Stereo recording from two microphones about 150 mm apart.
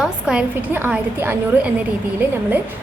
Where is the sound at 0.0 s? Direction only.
5° right (ahead or behind).